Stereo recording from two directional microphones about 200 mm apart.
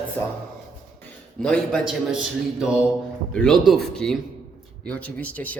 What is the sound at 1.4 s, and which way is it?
Speech, 5° left (ahead or behind).